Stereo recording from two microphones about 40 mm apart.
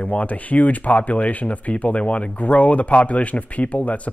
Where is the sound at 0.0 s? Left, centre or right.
Left.